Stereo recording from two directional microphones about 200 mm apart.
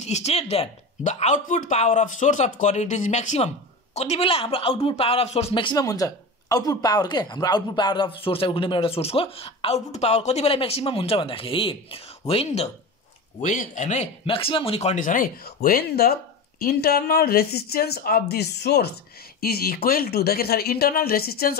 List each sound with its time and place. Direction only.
0.0 s speech: 35° left (ahead or behind); by 21.5 s 50° left (ahead or behind)